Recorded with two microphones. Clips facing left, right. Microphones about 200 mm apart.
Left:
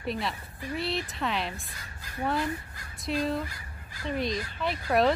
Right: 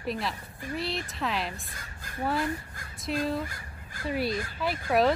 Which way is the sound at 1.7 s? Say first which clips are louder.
Right 1 dB; 50° right (ahead or behind).